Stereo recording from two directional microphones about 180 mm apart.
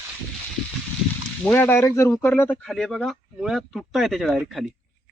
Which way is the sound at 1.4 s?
10° left (ahead or behind).